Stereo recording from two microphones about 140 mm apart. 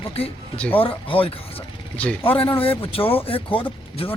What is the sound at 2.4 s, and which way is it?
Speech, 40° left (ahead or behind).